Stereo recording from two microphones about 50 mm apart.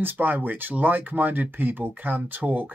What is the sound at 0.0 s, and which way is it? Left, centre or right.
Speech, right.